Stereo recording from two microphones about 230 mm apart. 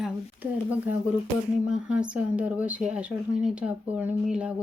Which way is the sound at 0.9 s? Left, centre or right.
Centre.